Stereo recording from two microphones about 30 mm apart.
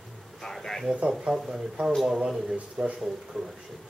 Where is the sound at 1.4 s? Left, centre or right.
Centre.